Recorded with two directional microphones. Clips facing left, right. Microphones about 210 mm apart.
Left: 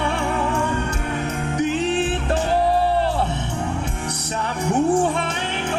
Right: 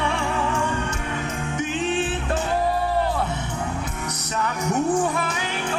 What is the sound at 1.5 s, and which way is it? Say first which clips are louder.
Music: left 4 dB; 35° left (ahead or behind).